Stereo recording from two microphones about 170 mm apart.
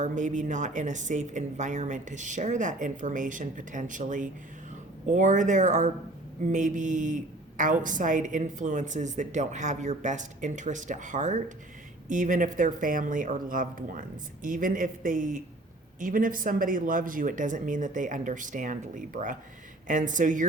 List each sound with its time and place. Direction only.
0.0 s speech: 45° right (ahead or behind)